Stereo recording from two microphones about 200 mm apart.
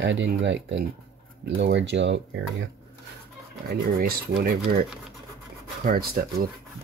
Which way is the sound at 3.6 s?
50° right (ahead or behind).